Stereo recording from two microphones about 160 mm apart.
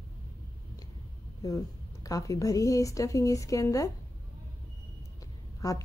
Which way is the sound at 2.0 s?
20° left (ahead or behind).